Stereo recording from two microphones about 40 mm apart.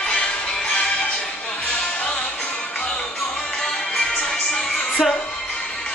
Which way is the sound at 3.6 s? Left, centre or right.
Centre.